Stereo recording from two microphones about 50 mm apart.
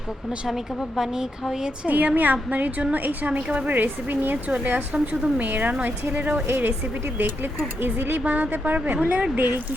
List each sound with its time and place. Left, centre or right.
0.4 s a woman's voice: centre
1.9 s a woman's voice: right
4.9 s a woman's voice: right
5.5 s a woman's voice: right
7.8 s speech: right
8.2 s a woman's voice: right